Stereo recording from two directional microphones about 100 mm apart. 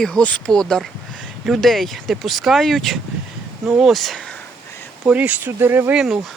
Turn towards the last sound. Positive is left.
turn(degrees=-5)  # may be behind; listen again after turning